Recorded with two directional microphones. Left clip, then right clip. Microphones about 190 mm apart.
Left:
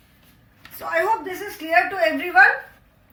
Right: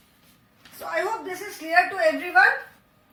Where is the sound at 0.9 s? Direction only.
15° left (ahead or behind).